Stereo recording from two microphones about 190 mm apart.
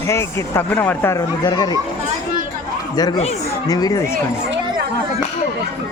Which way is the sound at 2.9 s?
20° left (ahead or behind).